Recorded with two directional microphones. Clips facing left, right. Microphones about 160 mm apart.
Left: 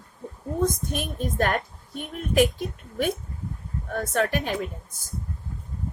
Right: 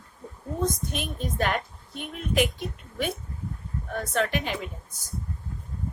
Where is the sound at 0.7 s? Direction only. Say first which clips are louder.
Left 2 dB; 50° left (ahead or behind).